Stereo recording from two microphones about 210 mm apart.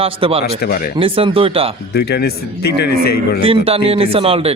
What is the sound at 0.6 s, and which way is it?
Speech, 45° left (ahead or behind).